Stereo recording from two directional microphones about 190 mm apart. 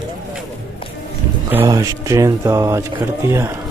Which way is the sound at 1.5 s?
15° right (ahead or behind).